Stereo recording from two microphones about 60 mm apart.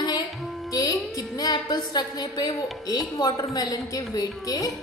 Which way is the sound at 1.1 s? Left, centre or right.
Left.